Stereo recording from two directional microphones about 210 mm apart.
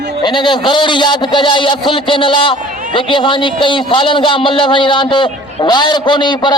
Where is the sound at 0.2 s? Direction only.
20° left (ahead or behind).